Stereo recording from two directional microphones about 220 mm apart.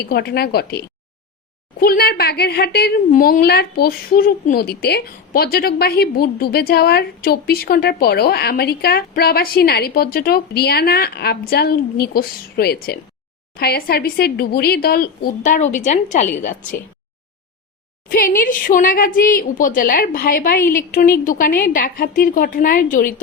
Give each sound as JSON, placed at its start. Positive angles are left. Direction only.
{"t": 0.0, "sound": "a woman's voice", "side_deg": 45}
{"t": 18.1, "sound": "a woman's voice", "side_deg": 40}